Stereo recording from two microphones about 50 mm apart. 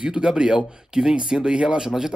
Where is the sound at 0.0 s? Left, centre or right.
Centre.